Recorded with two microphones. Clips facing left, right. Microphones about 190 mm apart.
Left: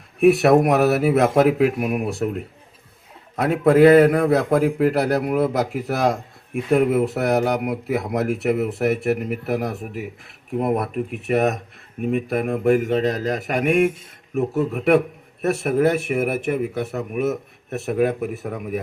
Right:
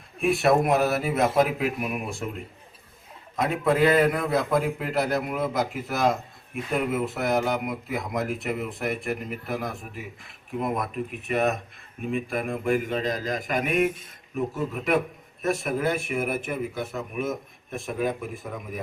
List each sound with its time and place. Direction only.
0.2 s a man's voice: 70° left (ahead or behind)
3.3 s a man's voice: 65° left (ahead or behind)
12.6 s speech: 45° left (ahead or behind)
12.9 s a man's voice: 65° left (ahead or behind)